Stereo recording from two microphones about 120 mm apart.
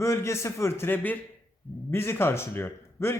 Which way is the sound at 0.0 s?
25° left (ahead or behind).